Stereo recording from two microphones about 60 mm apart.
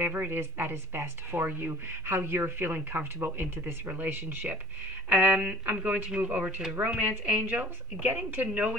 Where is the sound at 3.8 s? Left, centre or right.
Right.